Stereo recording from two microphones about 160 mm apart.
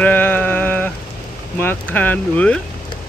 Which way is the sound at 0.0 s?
10° left (ahead or behind).